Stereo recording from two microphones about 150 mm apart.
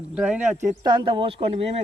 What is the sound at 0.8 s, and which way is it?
Speech, 30° right (ahead or behind).